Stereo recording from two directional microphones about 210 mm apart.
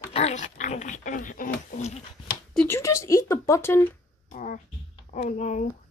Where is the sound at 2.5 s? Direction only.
5° left (ahead or behind).